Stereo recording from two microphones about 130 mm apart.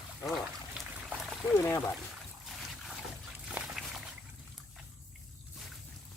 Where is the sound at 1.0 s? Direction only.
5° right (ahead or behind).